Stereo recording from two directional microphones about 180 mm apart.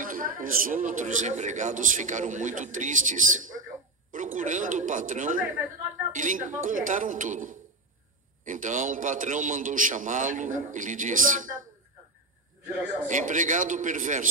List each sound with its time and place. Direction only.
0.0 s speech: 50° right (ahead or behind)
13.0 s speech: 45° right (ahead or behind)